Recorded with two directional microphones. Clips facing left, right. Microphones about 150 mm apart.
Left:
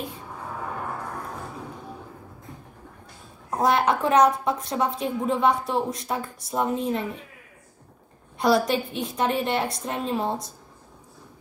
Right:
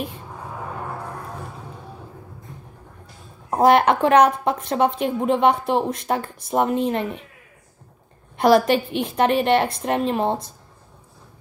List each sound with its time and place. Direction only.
3.4 s a woman's voice: 60° right (ahead or behind)
8.4 s a woman's voice: 60° right (ahead or behind)